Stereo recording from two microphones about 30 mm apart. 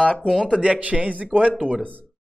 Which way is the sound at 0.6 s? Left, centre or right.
Right.